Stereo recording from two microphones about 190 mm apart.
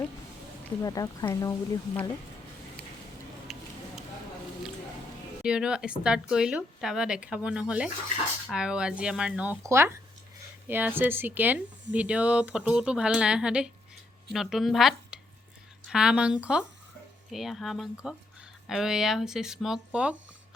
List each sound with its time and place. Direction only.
0.8 s speech: 15° left (ahead or behind)
5.4 s a woman's voice: 5° right (ahead or behind)